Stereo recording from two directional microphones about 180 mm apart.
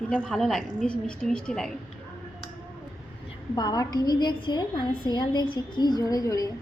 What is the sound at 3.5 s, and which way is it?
A woman's voice, 20° left (ahead or behind).